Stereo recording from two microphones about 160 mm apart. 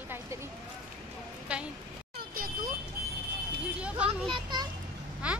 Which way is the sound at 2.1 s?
70° right (ahead or behind).